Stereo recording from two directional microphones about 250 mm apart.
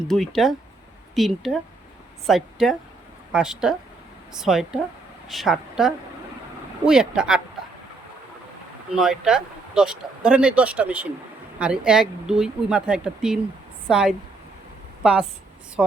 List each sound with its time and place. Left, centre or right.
0.1 s speech: centre
9.0 s speech: centre